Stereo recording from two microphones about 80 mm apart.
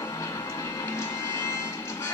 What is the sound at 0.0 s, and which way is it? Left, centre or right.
Music, left.